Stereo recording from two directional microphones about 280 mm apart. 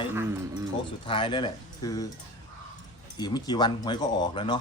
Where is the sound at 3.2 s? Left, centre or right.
Centre.